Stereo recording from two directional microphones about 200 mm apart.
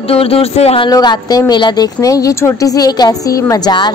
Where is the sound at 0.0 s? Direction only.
30° left (ahead or behind).